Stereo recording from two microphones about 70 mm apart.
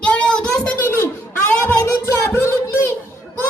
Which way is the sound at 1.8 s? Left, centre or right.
Left.